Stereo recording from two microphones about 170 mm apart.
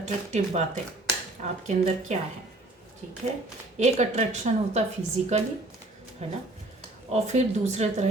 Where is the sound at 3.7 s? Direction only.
45° right (ahead or behind).